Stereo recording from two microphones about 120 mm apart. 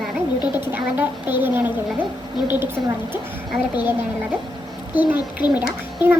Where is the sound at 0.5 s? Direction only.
15° right (ahead or behind).